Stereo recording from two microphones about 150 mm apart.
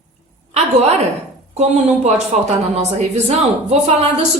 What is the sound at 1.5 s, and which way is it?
A woman's voice, 45° right (ahead or behind).